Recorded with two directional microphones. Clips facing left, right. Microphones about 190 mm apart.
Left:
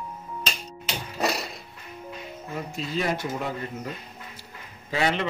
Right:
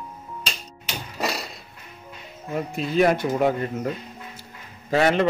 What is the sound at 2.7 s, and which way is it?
Speech, 60° right (ahead or behind).